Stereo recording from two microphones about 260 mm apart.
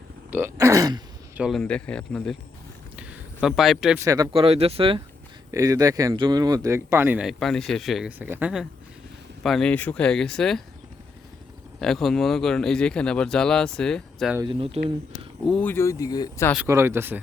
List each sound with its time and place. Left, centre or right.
0.3 s speech: centre
1.4 s speech: centre
2.9 s a sound: centre
4.0 s speech: centre
11.8 s speech: centre
14.3 s speech: centre
15.4 s speech: centre
16.6 s speech: centre